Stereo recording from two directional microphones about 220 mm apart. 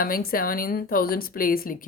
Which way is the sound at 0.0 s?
40° left (ahead or behind).